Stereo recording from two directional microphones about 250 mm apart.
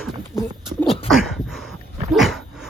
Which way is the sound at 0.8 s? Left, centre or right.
Centre.